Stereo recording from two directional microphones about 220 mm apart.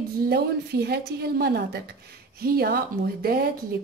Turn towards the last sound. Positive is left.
turn(degrees=-45)  # may be behind; listen again after turning